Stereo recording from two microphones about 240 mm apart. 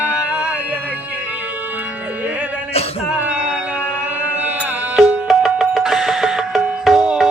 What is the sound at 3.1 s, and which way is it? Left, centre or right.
Music, centre.